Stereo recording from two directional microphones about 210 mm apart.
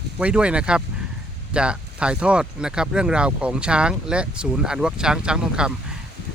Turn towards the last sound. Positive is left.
turn(degrees=-5)  # may be behind; listen again after turning